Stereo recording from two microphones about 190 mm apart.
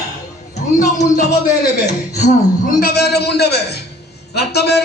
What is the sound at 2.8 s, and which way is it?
A man's voice, 55° left (ahead or behind).